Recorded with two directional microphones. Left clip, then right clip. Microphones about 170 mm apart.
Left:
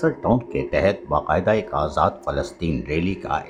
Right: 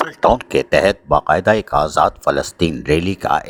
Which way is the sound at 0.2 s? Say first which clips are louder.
Right 8 dB; 60° right (ahead or behind).